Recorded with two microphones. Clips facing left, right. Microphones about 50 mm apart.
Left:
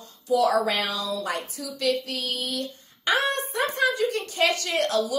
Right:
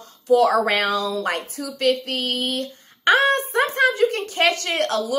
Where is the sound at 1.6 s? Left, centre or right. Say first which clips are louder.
Right 5 dB; right.